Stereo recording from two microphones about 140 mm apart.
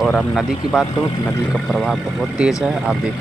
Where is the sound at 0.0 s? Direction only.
5° left (ahead or behind).